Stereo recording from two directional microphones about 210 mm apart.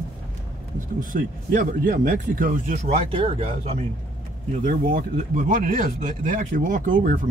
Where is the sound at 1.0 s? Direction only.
40° right (ahead or behind).